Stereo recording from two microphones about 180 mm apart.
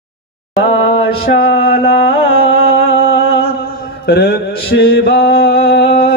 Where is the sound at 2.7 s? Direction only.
70° left (ahead or behind).